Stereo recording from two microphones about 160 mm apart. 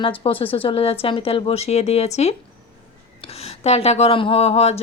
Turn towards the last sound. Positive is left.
turn(degrees=40)  # may be behind; listen again after turning